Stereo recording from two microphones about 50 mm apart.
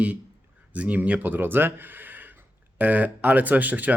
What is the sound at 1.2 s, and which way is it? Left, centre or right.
Speech, right.